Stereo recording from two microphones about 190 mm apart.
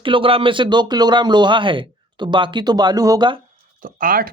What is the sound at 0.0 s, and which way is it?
Speech, 25° right (ahead or behind).